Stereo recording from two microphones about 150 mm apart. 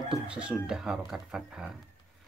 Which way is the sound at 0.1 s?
5° right (ahead or behind).